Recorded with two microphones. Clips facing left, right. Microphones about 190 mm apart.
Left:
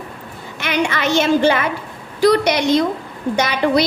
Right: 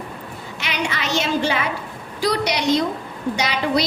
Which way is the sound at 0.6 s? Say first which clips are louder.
Left 7 dB; 55° left (ahead or behind).